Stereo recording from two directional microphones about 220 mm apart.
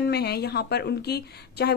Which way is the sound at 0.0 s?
45° left (ahead or behind).